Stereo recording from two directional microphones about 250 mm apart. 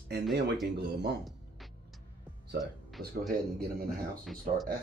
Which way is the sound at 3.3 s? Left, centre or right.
Right.